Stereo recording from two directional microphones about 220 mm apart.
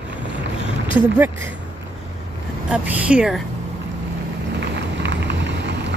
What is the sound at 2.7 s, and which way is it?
Speech, 5° right (ahead or behind).